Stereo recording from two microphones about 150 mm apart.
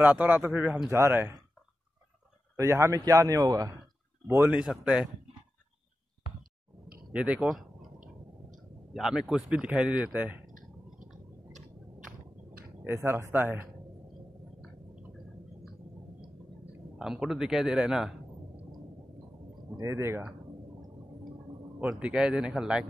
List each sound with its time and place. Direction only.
0.0 s a man's voice: 10° right (ahead or behind)
2.5 s a man's voice: 20° right (ahead or behind)
4.3 s a man's voice: 10° right (ahead or behind)
7.1 s a man's voice: 5° right (ahead or behind)
8.9 s a man's voice: centre (ahead or behind)
12.8 s a man's voice: 15° right (ahead or behind)
17.0 s a man's voice: 5° right (ahead or behind)
19.8 s a man's voice: 20° right (ahead or behind)
21.7 s a man's voice: 5° right (ahead or behind)